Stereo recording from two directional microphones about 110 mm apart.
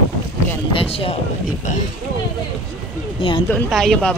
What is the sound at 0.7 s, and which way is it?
Speech, 60° left (ahead or behind).